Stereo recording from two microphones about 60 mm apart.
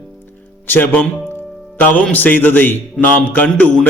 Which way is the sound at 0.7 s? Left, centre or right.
Left.